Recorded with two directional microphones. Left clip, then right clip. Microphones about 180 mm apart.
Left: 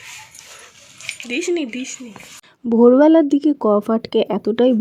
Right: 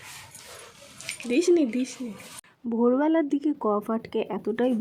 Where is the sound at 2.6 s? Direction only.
35° left (ahead or behind).